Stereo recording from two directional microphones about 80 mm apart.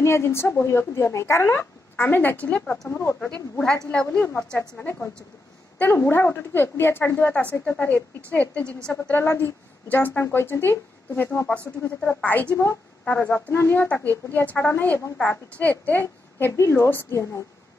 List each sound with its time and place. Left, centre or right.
0.0 s a woman's voice: left; by 2.8 s centre
2.9 s speech: left
3.5 s a woman's voice: centre
9.1 s a woman's voice: left
11.4 s a woman's voice: centre